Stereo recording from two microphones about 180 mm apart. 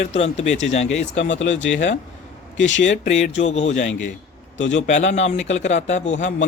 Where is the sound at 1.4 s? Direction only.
90° left.